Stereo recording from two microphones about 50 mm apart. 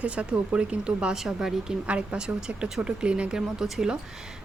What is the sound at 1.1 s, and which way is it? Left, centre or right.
Speech, centre.